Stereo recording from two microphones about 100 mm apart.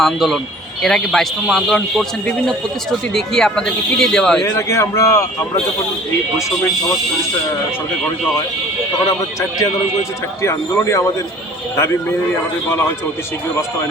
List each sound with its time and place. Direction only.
0.0 s speech: centre (ahead or behind)
4.4 s speech: 30° left (ahead or behind)
10.4 s speech: 25° left (ahead or behind)